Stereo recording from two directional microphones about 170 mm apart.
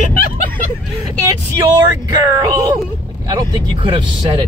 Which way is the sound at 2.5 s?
20° right (ahead or behind).